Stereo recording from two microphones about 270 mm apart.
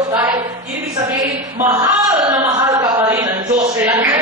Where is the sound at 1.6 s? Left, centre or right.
Centre.